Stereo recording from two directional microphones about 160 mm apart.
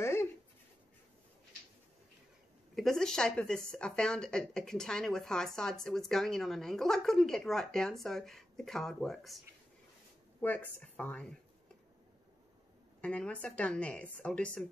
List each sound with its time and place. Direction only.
0.0 s a sound: 15° left (ahead or behind)
2.7 s speech: centre (ahead or behind)
10.4 s speech: 10° left (ahead or behind)
13.0 s speech: 10° left (ahead or behind)